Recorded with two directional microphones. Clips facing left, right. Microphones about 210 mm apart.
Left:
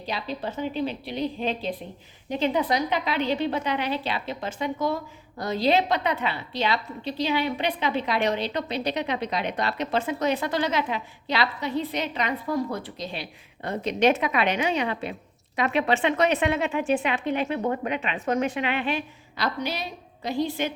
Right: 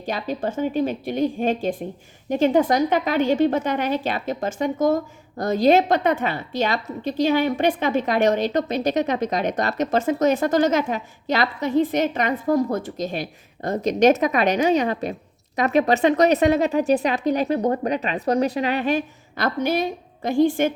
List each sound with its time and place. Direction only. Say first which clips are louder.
0.0 s a woman's voice: right 5 dB; 50° right (ahead or behind)